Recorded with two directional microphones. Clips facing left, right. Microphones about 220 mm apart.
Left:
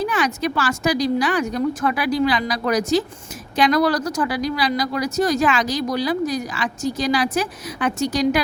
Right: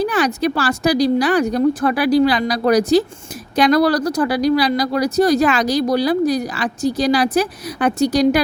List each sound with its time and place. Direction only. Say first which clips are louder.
0.0 s speech: right 4 dB; 35° right (ahead or behind)